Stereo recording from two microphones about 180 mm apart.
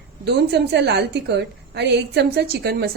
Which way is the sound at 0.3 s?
70° right (ahead or behind).